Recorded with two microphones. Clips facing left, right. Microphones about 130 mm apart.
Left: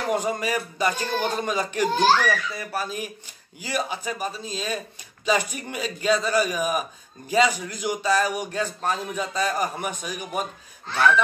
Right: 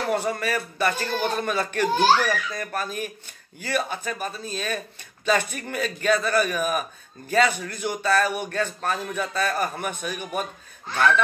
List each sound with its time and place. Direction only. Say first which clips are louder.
0.1 s a man's voice: left 2 dB; 15° left (ahead or behind)
1.9 s a child's voice: right 1 dB; 10° right (ahead or behind)
2.2 s a man's voice: left 1 dB; 10° left (ahead or behind)